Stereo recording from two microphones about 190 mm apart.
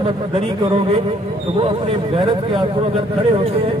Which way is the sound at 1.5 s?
30° right (ahead or behind).